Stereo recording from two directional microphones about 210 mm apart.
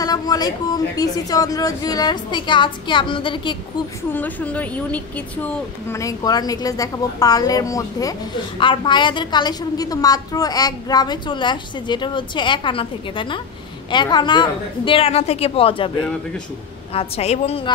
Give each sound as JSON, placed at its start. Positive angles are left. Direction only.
{"t": 0.0, "sound": "a woman's voice", "side_deg": 20}
{"t": 4.1, "sound": "a woman's voice", "side_deg": 10}
{"t": 16.9, "sound": "a woman's voice", "side_deg": 30}